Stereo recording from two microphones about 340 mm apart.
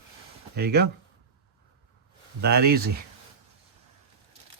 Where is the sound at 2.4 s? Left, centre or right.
Right.